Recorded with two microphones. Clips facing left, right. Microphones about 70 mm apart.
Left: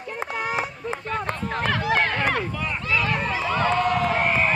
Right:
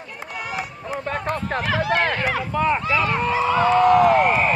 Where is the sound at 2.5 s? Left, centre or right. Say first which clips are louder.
Right 6 dB; right.